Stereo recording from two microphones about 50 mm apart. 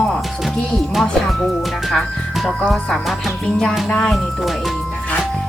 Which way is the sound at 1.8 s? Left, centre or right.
Centre.